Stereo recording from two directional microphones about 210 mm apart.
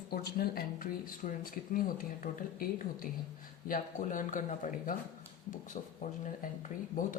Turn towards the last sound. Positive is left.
turn(degrees=35)  # may be behind; listen again after turning